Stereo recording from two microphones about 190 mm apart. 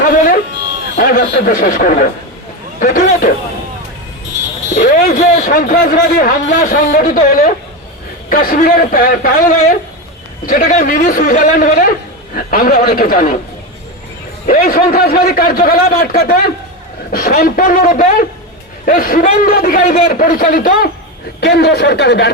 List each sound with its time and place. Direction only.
0.9 s a man's voice: 50° left (ahead or behind)
4.7 s a man's voice: 45° left (ahead or behind)
14.4 s a man's voice: 50° left (ahead or behind)
21.4 s speech: 60° left (ahead or behind)